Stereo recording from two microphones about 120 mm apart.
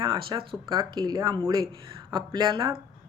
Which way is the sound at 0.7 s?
30° right (ahead or behind).